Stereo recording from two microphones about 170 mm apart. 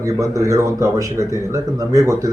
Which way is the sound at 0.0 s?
20° right (ahead or behind).